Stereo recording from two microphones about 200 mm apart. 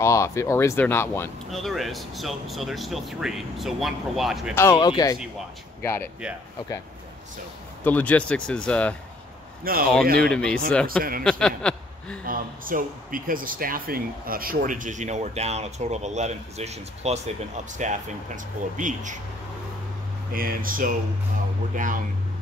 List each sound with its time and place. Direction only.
0.0 s speech: 15° left (ahead or behind)
1.5 s speech: centre (ahead or behind)
4.6 s speech: 15° left (ahead or behind)
7.8 s speech: 10° left (ahead or behind)
9.7 s speech: 45° right (ahead or behind)
10.2 s speech: 5° left (ahead or behind)
12.3 s speech: 45° right (ahead or behind)
20.3 s speech: 45° right (ahead or behind)